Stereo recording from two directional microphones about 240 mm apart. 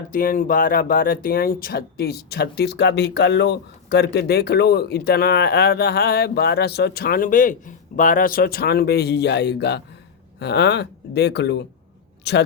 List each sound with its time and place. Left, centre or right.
0.1 s speech: left